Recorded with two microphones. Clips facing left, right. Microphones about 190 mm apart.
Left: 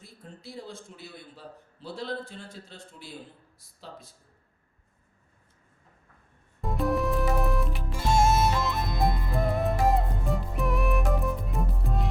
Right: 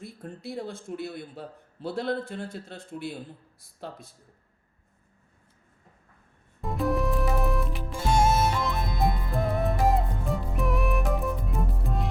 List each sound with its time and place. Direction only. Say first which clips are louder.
0.0 s a man's voice: right 7 dB; 60° right (ahead or behind)
6.6 s music: even; centre (ahead or behind)